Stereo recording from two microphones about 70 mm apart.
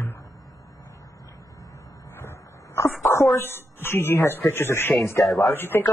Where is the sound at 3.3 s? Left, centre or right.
Left.